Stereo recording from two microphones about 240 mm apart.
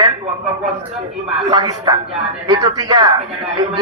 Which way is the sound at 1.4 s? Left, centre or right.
Centre.